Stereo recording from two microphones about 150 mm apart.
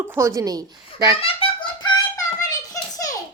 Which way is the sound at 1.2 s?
35° left (ahead or behind).